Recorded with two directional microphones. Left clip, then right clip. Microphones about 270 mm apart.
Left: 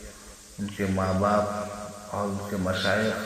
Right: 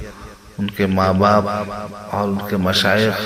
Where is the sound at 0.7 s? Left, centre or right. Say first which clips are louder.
Right 10 dB; right.